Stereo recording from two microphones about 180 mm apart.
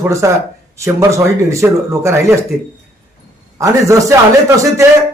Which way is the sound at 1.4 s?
15° right (ahead or behind).